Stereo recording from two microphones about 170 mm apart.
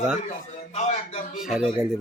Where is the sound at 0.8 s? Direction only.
40° left (ahead or behind).